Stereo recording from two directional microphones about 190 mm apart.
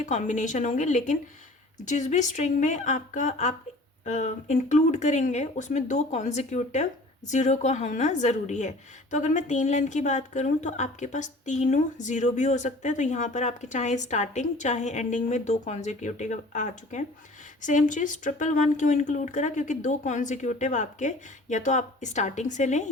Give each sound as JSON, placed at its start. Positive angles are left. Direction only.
{"t": 0.0, "sound": "a woman's voice", "side_deg": 40}